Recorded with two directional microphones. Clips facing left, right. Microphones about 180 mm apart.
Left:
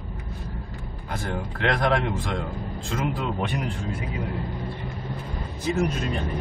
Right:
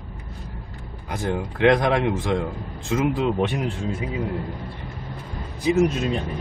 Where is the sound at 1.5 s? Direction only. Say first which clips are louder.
Right 5 dB; 15° right (ahead or behind).